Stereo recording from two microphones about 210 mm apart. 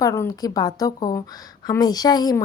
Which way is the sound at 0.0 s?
15° left (ahead or behind).